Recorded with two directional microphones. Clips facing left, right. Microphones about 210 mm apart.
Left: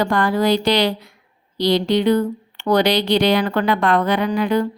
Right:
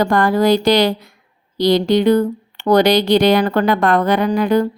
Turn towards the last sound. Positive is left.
turn(degrees=-40)  # may be behind; listen again after turning